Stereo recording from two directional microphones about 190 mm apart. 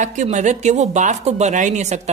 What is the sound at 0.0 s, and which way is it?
A woman's voice, 40° right (ahead or behind).